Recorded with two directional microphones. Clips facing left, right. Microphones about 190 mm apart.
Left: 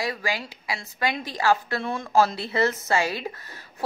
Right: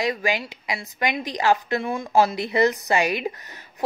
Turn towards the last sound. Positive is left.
turn(degrees=-20)  # may be behind; listen again after turning